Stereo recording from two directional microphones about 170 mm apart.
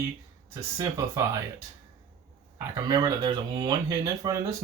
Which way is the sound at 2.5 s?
20° right (ahead or behind).